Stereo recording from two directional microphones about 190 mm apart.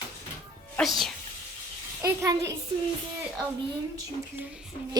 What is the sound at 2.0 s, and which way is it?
Speech, 15° right (ahead or behind).